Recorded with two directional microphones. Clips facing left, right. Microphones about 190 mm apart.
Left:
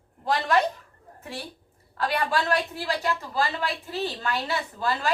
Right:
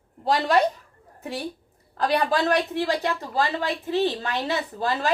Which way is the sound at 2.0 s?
40° right (ahead or behind).